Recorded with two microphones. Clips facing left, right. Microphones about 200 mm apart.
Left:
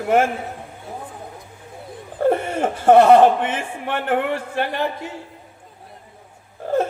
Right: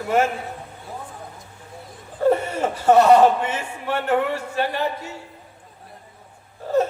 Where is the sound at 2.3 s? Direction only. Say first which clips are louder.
Even; 50° left (ahead or behind).